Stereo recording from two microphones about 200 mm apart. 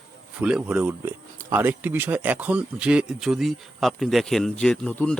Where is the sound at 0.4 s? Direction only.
5° right (ahead or behind).